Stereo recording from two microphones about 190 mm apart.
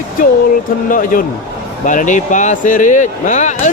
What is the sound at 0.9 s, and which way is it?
Speech, 45° left (ahead or behind).